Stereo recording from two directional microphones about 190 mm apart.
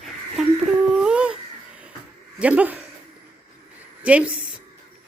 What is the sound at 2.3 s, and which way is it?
Speech, 5° right (ahead or behind).